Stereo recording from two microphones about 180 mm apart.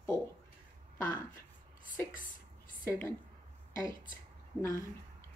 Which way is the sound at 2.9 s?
15° left (ahead or behind).